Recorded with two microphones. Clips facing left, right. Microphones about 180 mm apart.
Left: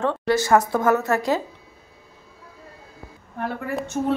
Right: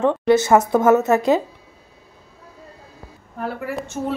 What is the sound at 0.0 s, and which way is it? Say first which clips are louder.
A woman's voice: right 5 dB; 20° right (ahead or behind).